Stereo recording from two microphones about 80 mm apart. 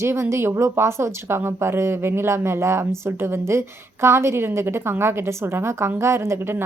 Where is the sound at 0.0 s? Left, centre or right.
Right.